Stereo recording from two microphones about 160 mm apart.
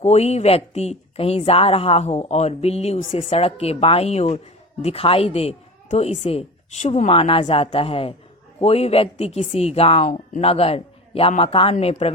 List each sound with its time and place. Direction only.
0.0 s speech: 40° left (ahead or behind)